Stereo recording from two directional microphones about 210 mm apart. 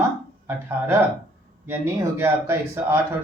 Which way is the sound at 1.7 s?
10° right (ahead or behind).